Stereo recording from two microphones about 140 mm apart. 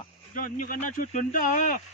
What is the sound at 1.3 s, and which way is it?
Speech, 70° left (ahead or behind).